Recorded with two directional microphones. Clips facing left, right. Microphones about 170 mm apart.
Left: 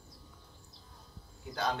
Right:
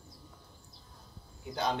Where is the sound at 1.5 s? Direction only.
20° right (ahead or behind).